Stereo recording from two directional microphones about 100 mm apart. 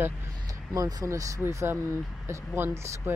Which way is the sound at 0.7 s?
35° right (ahead or behind).